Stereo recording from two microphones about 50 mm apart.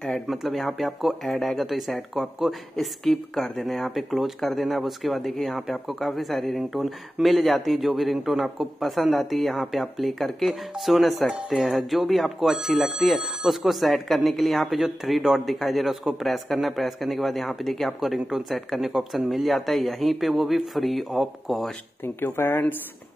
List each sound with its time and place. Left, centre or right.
0.3 s speech: centre
22.0 s speech: left